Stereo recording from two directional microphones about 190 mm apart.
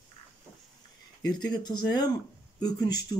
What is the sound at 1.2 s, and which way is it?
Speech, 20° left (ahead or behind).